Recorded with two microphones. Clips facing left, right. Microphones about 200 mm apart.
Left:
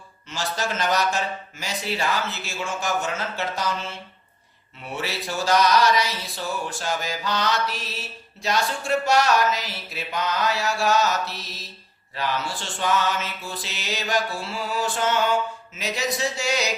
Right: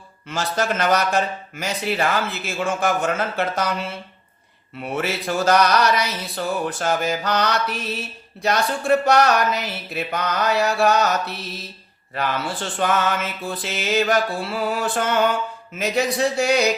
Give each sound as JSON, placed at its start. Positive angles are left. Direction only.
{"t": 0.3, "sound": "mantra", "side_deg": -60}
{"t": 4.8, "sound": "mantra", "side_deg": -55}
{"t": 12.1, "sound": "mantra", "side_deg": -55}